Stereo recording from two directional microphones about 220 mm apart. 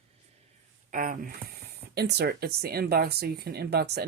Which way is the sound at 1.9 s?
45° right (ahead or behind).